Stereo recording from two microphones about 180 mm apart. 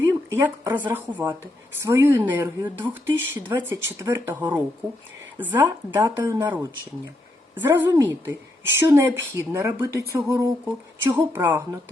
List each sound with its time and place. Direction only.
0.3 s speech: 15° right (ahead or behind)